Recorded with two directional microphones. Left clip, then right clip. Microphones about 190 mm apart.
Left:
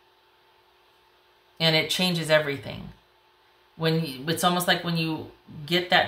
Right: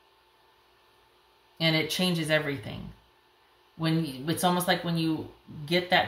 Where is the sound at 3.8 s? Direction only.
15° left (ahead or behind).